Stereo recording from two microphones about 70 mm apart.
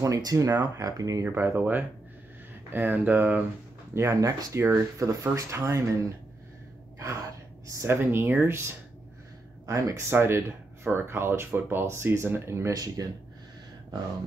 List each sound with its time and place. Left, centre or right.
0.0 s speech: right
1.2 s speech: right
1.6 s speech: right
4.1 s speech: right
7.0 s gasp: right
7.9 s speech: right
9.7 s speech: right
10.0 s speech: right
12.7 s speech: right